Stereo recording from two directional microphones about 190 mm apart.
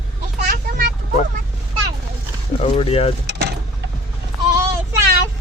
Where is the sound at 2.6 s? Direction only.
30° left (ahead or behind).